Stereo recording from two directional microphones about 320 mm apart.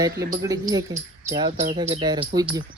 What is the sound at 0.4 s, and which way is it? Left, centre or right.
Speech, centre.